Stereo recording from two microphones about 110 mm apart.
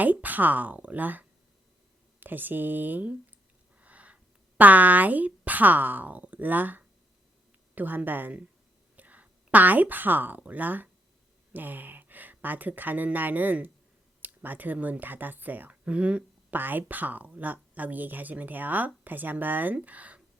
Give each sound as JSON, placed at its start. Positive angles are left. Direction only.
{"t": 0.0, "sound": "speech", "side_deg": -15}
{"t": 2.2, "sound": "a woman's voice", "side_deg": -15}